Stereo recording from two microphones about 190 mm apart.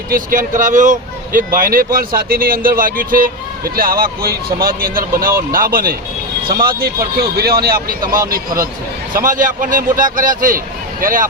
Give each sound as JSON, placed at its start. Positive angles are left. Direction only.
{"t": 0.1, "sound": "speech", "side_deg": -45}
{"t": 8.0, "sound": "speech", "side_deg": -20}
{"t": 9.1, "sound": "speech", "side_deg": -45}